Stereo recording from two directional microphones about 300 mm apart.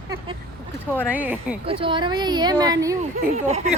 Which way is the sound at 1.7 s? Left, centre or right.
Centre.